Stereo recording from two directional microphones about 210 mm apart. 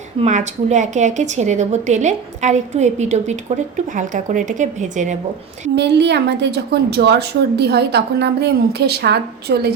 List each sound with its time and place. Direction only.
0.2 s a woman's voice: 35° right (ahead or behind)
5.7 s a woman's voice: 55° right (ahead or behind)